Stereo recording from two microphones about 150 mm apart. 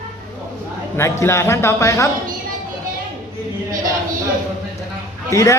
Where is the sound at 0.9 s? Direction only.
15° left (ahead or behind).